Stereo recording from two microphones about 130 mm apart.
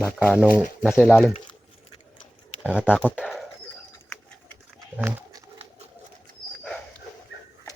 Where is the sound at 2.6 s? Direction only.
10° right (ahead or behind).